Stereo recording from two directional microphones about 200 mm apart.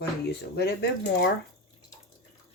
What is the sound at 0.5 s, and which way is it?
Speech, 55° left (ahead or behind).